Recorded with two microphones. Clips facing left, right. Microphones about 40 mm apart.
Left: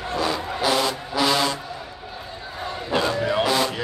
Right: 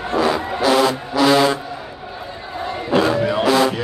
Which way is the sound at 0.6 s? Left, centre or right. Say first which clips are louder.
Right 6 dB; centre.